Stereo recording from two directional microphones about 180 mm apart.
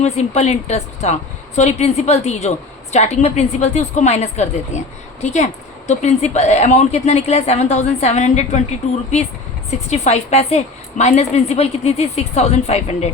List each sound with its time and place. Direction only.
0.0 s a woman's voice: 40° left (ahead or behind)
9.6 s a woman's voice: 40° left (ahead or behind)